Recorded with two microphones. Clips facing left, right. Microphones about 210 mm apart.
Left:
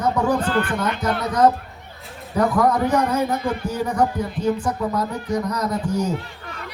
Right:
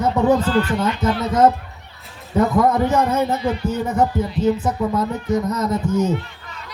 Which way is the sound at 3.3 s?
50° left (ahead or behind).